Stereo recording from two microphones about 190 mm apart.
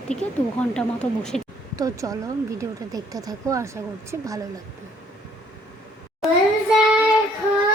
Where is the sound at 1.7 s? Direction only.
15° right (ahead or behind).